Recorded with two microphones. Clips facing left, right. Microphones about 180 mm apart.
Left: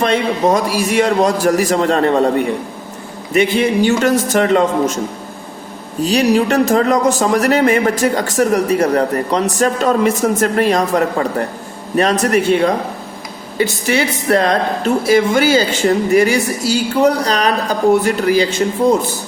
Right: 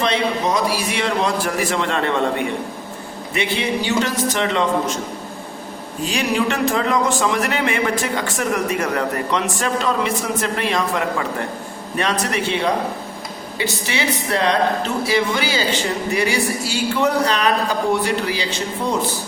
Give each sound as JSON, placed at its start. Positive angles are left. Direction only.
{"t": 0.0, "sound": "a man's voice", "side_deg": 50}
{"t": 3.3, "sound": "a man's voice", "side_deg": 50}
{"t": 6.0, "sound": "a man's voice", "side_deg": 40}
{"t": 13.6, "sound": "a man's voice", "side_deg": 45}